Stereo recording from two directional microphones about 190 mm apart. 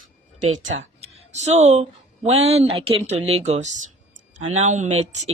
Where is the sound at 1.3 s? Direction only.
35° right (ahead or behind).